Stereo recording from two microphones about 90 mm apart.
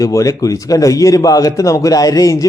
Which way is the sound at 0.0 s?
40° left (ahead or behind).